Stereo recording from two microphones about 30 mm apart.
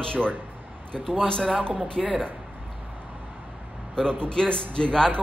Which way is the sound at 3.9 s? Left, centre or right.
Left.